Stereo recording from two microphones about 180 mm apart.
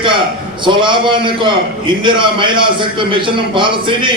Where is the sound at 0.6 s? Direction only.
25° right (ahead or behind).